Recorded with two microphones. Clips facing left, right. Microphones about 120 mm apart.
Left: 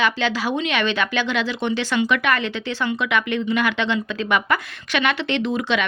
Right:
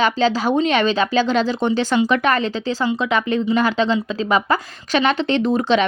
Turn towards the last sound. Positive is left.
turn(degrees=-40)  # may be behind; listen again after turning